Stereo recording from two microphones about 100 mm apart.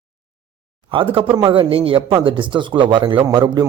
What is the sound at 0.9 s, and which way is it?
A man's voice, 60° right (ahead or behind).